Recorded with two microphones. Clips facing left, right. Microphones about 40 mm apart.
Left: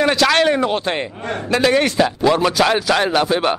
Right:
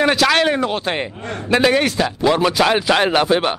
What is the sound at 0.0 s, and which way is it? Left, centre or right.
A man's voice, centre.